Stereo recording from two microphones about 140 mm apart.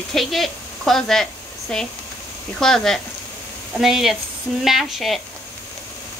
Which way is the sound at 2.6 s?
5° left (ahead or behind).